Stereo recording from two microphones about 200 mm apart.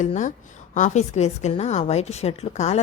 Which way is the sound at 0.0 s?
40° left (ahead or behind).